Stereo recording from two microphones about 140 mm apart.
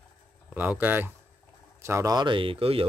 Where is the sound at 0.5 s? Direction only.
15° right (ahead or behind).